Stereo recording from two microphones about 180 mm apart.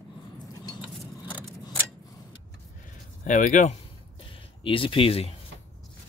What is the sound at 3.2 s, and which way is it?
Speech, 45° left (ahead or behind).